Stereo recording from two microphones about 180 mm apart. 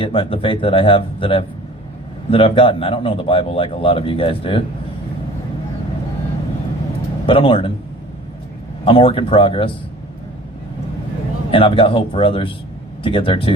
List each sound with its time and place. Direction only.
0.0 s speech: 30° left (ahead or behind)
7.3 s speech: 30° left (ahead or behind)
8.8 s speech: 30° left (ahead or behind)
11.5 s speech: 30° left (ahead or behind)